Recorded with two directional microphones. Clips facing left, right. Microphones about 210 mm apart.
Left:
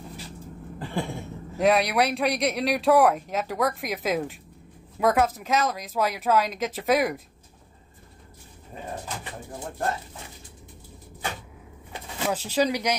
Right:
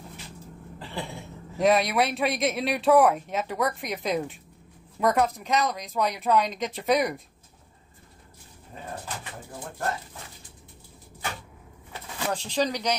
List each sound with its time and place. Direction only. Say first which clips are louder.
0.7 s a sound: left 5 dB; 50° left (ahead or behind)
1.6 s speech: left 1 dB; centre (ahead or behind)
12.3 s speech: left 3 dB; 5° left (ahead or behind)